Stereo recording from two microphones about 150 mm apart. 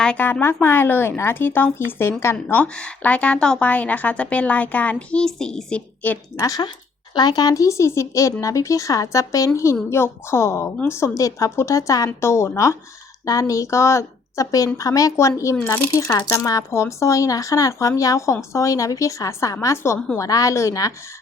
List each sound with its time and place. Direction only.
0.0 s a woman's voice: 10° left (ahead or behind)
6.4 s a woman's voice: 25° left (ahead or behind)